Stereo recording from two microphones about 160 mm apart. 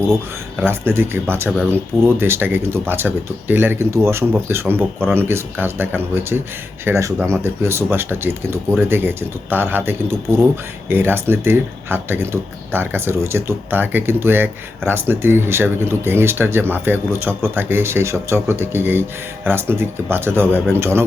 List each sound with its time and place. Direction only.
0.6 s speech: 15° right (ahead or behind)